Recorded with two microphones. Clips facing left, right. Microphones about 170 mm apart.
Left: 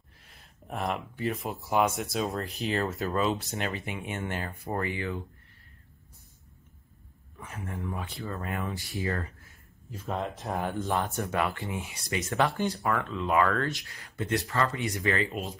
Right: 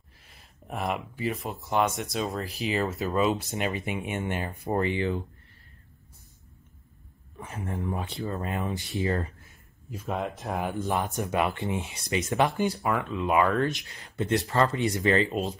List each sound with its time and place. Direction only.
0.2 s speech: centre (ahead or behind); by 5.2 s 25° right (ahead or behind)
7.3 s speech: 25° right (ahead or behind)
9.8 s speech: 10° right (ahead or behind)
10.6 s speech: 15° right (ahead or behind); by 15.5 s 30° right (ahead or behind)